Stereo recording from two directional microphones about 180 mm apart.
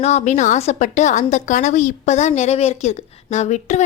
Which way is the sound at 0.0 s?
40° left (ahead or behind).